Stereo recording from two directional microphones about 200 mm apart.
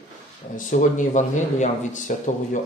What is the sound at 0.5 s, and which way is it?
Speech, 40° left (ahead or behind).